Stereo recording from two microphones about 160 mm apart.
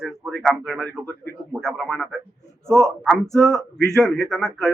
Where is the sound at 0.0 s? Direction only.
5° left (ahead or behind).